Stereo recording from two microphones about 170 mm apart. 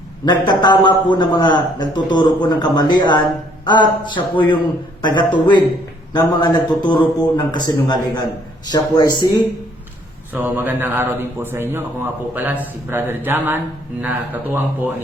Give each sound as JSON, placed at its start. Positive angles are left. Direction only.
{"t": 0.3, "sound": "a man's voice", "side_deg": 25}
{"t": 10.3, "sound": "a man's voice", "side_deg": -10}